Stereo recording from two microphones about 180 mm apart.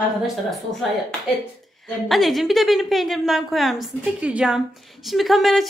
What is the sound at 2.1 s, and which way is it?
A woman's voice, centre (ahead or behind).